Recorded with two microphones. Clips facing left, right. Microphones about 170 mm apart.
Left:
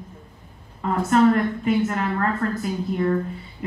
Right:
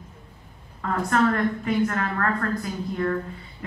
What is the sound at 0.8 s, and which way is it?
A man's voice, 20° left (ahead or behind).